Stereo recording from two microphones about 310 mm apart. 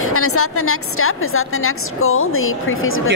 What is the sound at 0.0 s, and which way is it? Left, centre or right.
A woman's voice, left.